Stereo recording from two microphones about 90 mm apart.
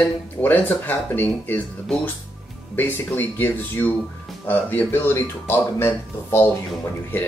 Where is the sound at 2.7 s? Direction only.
20° left (ahead or behind).